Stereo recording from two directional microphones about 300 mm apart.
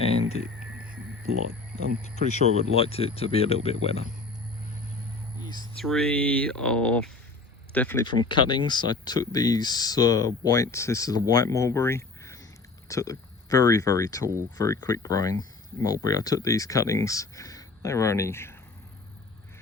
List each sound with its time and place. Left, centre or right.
0.1 s a sound: centre
2.0 s speech: left
5.7 s speech: centre